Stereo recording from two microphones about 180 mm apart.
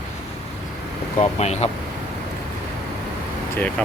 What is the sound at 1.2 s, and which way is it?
Speech, 35° left (ahead or behind).